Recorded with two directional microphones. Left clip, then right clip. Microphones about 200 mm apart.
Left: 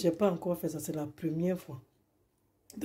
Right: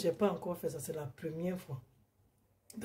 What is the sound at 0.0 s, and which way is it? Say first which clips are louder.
Speech: left 4 dB; 40° left (ahead or behind).